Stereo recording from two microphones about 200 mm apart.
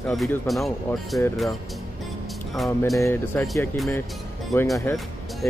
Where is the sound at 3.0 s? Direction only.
15° left (ahead or behind).